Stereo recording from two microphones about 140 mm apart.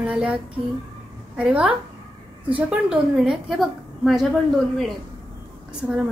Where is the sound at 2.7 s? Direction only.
5° right (ahead or behind).